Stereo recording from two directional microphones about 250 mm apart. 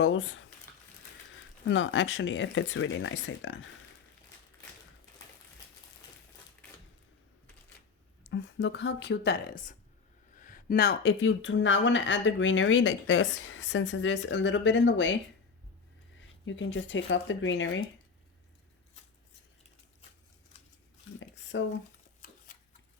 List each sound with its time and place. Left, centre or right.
0.0 s speech: left
1.6 s speech: left
8.3 s speech: left
16.5 s speech: left
21.5 s speech: left